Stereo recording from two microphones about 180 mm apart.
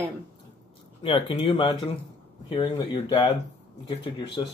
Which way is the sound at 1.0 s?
30° left (ahead or behind).